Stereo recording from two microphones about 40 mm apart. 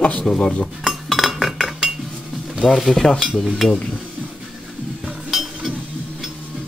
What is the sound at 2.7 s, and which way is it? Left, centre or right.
Speech, centre.